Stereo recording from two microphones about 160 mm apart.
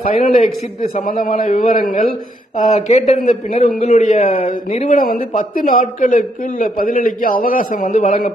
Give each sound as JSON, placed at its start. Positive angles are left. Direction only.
{"t": 0.0, "sound": "a man's voice", "side_deg": 40}
{"t": 1.0, "sound": "a man's voice", "side_deg": 60}
{"t": 2.7, "sound": "speech", "side_deg": 40}
{"t": 3.2, "sound": "a man's voice", "side_deg": 55}